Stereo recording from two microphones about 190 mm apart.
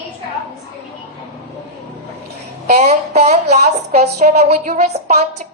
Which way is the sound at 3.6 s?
55° right (ahead or behind).